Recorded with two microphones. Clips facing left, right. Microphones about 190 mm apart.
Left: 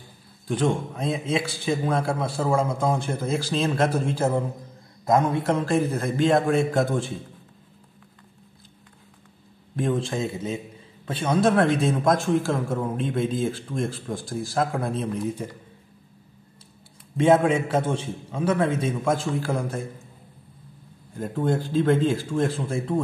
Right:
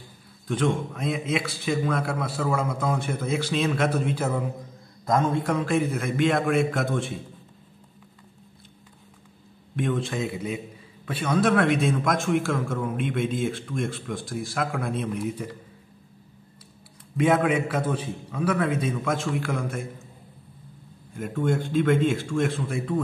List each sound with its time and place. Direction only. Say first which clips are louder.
0.5 s a man's voice: left 1 dB; 30° left (ahead or behind)
9.8 s a man's voice: left 2 dB; 30° left (ahead or behind)
17.2 s a man's voice: left 3 dB; 30° left (ahead or behind)
21.2 s a man's voice: left 1 dB; 35° left (ahead or behind)